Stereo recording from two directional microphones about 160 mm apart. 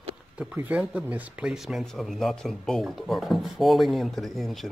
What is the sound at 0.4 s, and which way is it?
Speech, 10° right (ahead or behind).